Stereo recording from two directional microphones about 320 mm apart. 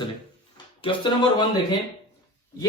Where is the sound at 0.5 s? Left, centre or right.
Centre.